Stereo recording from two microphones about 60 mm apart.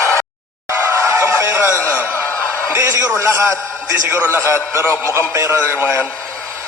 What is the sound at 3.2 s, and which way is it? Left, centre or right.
A man's voice, right.